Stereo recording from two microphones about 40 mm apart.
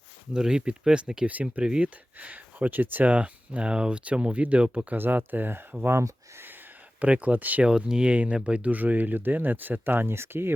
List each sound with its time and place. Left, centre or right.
0.3 s speech: centre
1.3 s speech: right
3.1 s speech: right
4.9 s speech: right
5.8 s speech: right
7.0 s speech: right
7.8 s speech: right
8.1 s speech: right
8.7 s speech: right